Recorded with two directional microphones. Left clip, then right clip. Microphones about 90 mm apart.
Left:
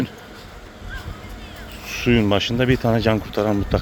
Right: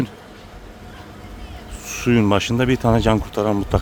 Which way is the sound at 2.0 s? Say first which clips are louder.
Right 1 dB; 50° right (ahead or behind).